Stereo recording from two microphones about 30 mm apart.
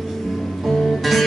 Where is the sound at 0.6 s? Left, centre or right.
Centre.